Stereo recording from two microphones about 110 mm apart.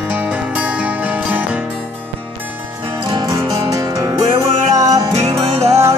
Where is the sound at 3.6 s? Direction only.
30° right (ahead or behind); by 4.6 s 50° right (ahead or behind).